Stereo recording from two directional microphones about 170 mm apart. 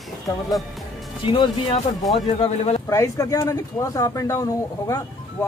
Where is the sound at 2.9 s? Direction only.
20° left (ahead or behind).